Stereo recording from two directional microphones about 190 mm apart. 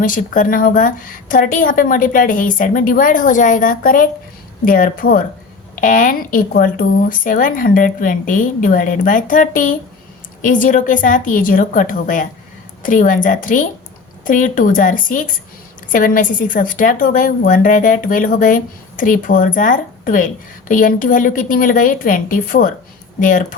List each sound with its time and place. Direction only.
0.0 s a woman's voice: 45° left (ahead or behind)